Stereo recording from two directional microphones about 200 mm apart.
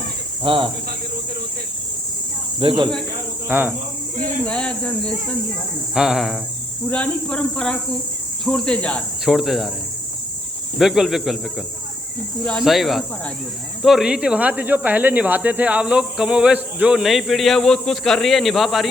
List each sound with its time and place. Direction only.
0.4 s speech: 25° right (ahead or behind)
2.6 s speech: 25° right (ahead or behind)
3.5 s speech: 10° right (ahead or behind)
4.4 s speech: 5° left (ahead or behind)
10.8 s speech: centre (ahead or behind)
12.5 s speech: centre (ahead or behind)